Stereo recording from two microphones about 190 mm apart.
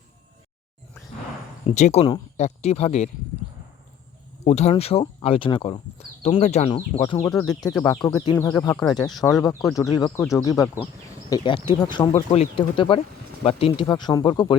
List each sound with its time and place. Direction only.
1.6 s speech: 35° left (ahead or behind)
4.4 s speech: 35° left (ahead or behind)
7.2 s speech: 20° left (ahead or behind)